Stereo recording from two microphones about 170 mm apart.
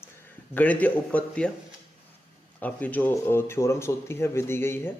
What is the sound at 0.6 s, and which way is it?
Speech, 10° left (ahead or behind).